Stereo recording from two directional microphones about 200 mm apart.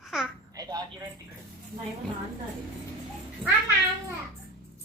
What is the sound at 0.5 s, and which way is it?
Speech, 20° right (ahead or behind).